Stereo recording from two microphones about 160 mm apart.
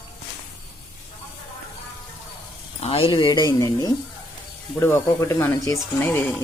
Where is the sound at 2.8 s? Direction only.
35° left (ahead or behind).